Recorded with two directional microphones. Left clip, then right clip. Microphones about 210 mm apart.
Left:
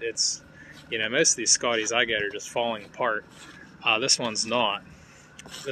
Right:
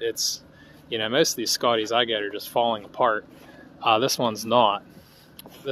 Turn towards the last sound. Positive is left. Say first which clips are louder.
# right 5 dB
turn(degrees=-20)  # may be behind; listen again after turning